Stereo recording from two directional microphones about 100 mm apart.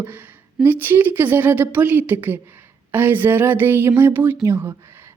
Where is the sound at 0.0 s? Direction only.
20° right (ahead or behind).